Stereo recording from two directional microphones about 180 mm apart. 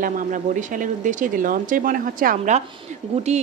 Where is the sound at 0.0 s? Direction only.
45° right (ahead or behind).